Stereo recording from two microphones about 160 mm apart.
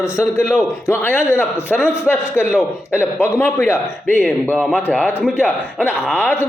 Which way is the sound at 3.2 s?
15° left (ahead or behind).